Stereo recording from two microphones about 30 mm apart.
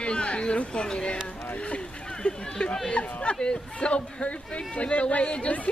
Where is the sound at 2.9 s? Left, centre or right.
Left.